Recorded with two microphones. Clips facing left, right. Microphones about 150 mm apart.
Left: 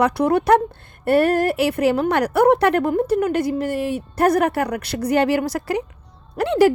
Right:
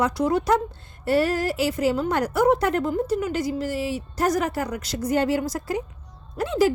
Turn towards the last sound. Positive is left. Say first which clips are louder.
# left 5 dB
turn(degrees=65)  # may be behind; listen again after turning